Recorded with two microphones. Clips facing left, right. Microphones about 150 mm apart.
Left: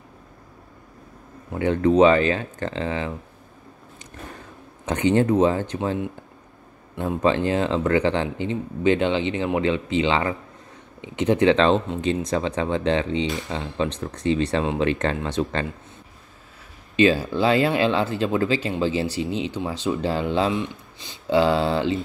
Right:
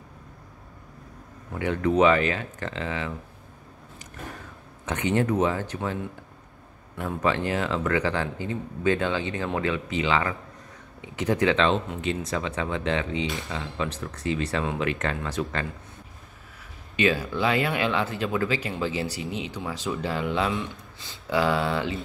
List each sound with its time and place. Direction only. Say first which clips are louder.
1.6 s speech: left 5 dB; 30° left (ahead or behind)
4.8 s speech: left 5 dB; 30° left (ahead or behind)
7.0 s speech: left 5 dB; 30° left (ahead or behind)
16.9 s speech: left 6 dB; 30° left (ahead or behind)